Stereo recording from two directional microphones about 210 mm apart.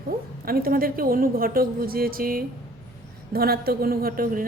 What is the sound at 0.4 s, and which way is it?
A woman's voice, 45° right (ahead or behind).